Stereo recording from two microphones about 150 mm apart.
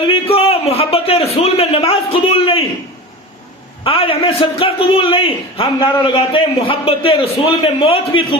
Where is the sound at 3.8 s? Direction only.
35° left (ahead or behind).